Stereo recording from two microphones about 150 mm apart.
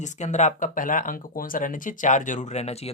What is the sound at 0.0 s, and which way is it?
Speech, 50° left (ahead or behind).